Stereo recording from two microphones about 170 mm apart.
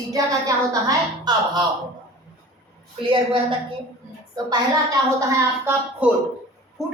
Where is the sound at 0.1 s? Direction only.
20° right (ahead or behind).